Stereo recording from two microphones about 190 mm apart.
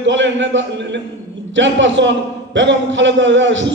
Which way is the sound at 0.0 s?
75° right (ahead or behind).